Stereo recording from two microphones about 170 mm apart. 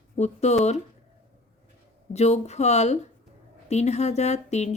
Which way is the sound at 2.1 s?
40° left (ahead or behind).